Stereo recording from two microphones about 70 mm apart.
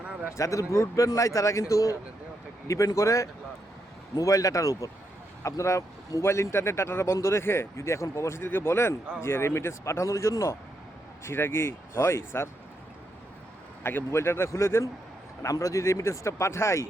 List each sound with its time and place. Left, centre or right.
0.0 s a sound: centre
0.3 s a man's voice: left
11.2 s a man's voice: left
13.8 s a man's voice: left